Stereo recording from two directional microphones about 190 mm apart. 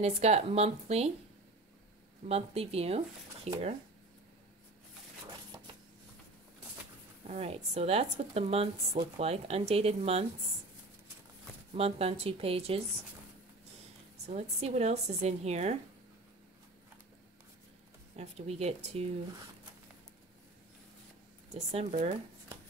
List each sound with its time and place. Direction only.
0.0 s speech: 35° right (ahead or behind)
2.2 s speech: 35° right (ahead or behind)
5.5 s a sound: 20° right (ahead or behind)
7.2 s speech: 35° right (ahead or behind)
11.7 s speech: 30° right (ahead or behind)
14.2 s speech: 35° right (ahead or behind)
18.1 s speech: 35° right (ahead or behind)
21.5 s speech: 35° right (ahead or behind)